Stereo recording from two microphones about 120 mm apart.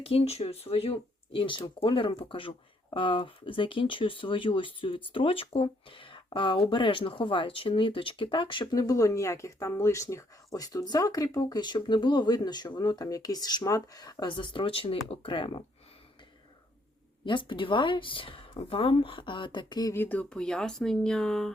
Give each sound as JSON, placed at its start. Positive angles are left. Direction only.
{"t": 0.0, "sound": "speech", "side_deg": 55}
{"t": 8.7, "sound": "speech", "side_deg": 30}
{"t": 17.2, "sound": "speech", "side_deg": 40}
{"t": 19.9, "sound": "speech", "side_deg": 15}